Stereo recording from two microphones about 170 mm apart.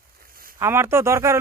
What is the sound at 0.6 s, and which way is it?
Speech, 15° right (ahead or behind).